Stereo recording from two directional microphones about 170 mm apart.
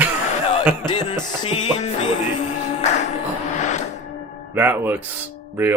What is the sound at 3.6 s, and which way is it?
Music, 45° left (ahead or behind).